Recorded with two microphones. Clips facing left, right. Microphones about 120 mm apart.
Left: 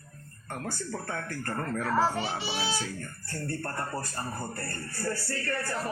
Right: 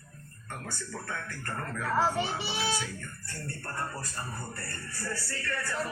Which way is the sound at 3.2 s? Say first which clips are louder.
Left 7 dB; 50° left (ahead or behind).